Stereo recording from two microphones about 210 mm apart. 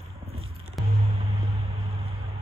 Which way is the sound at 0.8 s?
Centre (ahead or behind).